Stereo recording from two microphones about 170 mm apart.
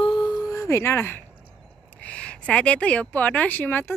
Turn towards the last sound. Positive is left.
turn(degrees=10)  # may be behind; listen again after turning